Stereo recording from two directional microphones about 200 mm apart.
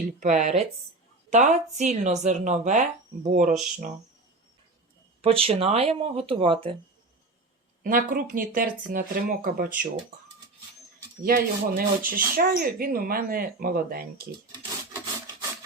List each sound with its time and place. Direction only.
0.2 s a woman's voice: 35° right (ahead or behind)
5.2 s speech: 30° right (ahead or behind)
7.9 s speech: 45° right (ahead or behind)
11.2 s speech: 45° right (ahead or behind)